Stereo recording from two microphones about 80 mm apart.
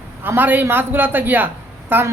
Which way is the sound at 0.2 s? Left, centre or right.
Right.